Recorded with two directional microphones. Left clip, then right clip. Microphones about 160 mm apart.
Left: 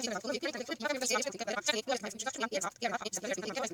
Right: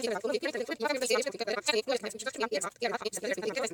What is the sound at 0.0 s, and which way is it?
Speech, 30° right (ahead or behind).